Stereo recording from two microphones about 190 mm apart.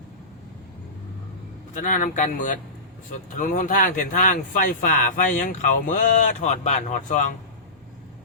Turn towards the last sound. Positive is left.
turn(degrees=40)  # may be behind; listen again after turning